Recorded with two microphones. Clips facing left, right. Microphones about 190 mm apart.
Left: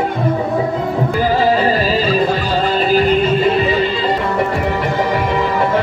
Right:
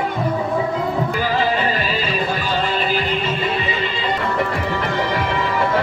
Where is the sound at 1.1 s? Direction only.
35° left (ahead or behind).